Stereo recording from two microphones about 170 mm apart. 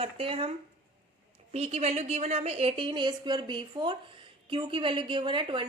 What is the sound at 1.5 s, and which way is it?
A woman's voice, 40° right (ahead or behind).